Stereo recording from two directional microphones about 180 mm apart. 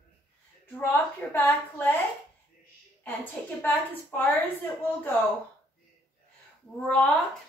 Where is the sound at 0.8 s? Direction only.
10° left (ahead or behind).